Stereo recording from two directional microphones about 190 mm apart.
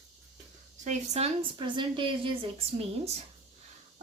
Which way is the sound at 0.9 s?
35° right (ahead or behind).